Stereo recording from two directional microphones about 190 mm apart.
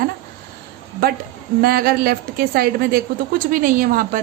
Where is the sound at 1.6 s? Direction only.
50° right (ahead or behind).